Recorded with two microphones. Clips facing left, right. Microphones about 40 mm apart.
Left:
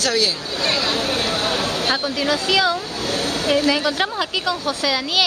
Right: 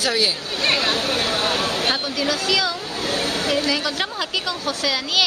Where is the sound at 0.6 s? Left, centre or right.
Right.